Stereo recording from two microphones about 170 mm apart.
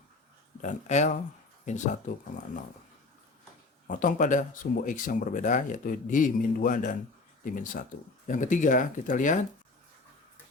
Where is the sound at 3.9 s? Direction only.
50° left (ahead or behind).